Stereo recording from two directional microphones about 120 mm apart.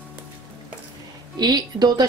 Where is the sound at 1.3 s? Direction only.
35° right (ahead or behind).